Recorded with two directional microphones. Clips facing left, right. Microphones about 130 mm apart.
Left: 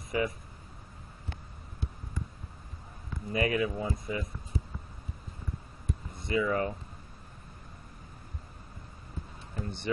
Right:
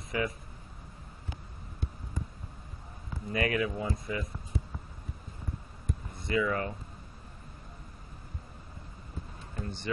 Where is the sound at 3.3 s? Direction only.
25° left (ahead or behind).